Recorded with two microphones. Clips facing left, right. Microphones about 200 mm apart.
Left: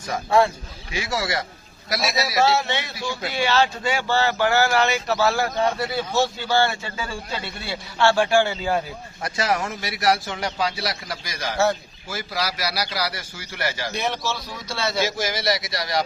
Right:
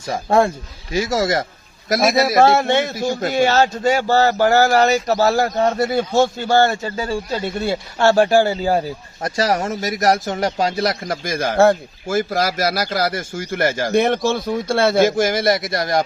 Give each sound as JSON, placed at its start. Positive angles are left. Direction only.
{"t": 0.3, "sound": "a man's voice", "side_deg": -45}